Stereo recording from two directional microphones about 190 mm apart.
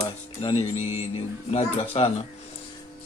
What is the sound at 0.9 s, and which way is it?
Speech, 30° left (ahead or behind).